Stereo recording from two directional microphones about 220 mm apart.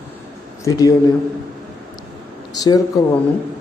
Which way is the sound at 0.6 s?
15° left (ahead or behind).